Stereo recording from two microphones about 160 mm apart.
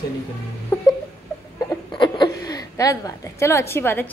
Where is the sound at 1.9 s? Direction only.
30° left (ahead or behind).